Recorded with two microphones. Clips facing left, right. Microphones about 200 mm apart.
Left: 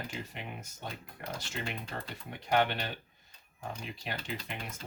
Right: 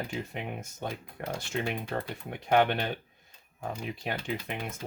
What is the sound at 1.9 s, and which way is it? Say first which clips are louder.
Speech: right 7 dB; 55° right (ahead or behind).